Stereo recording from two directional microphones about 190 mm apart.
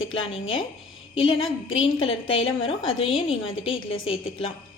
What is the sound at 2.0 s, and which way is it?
A woman's voice, 25° left (ahead or behind).